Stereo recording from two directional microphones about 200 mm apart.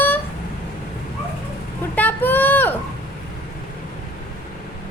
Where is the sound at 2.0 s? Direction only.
10° left (ahead or behind).